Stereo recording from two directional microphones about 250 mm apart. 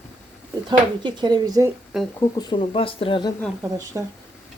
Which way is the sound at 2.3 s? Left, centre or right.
Centre.